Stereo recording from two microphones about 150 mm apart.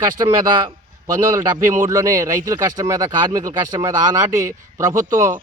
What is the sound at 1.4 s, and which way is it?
Speech, 20° right (ahead or behind).